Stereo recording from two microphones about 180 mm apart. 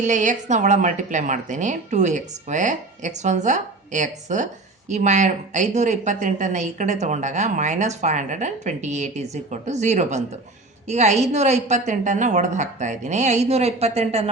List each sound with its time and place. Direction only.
0.0 s speech: 45° right (ahead or behind)